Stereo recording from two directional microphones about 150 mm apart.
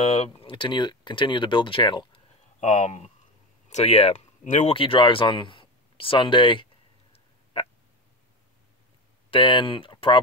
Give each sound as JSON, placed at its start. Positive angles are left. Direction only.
{"t": 0.0, "sound": "speech", "side_deg": 45}
{"t": 0.3, "sound": "speech", "side_deg": 35}
{"t": 2.6, "sound": "speech", "side_deg": 50}
{"t": 4.7, "sound": "a sound", "side_deg": 35}
{"t": 9.3, "sound": "speech", "side_deg": 35}